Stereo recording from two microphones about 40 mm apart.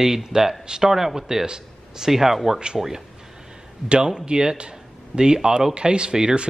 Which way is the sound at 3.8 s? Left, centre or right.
Right.